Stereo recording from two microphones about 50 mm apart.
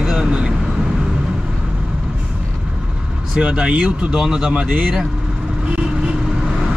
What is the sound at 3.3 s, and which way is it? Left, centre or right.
Speech, centre.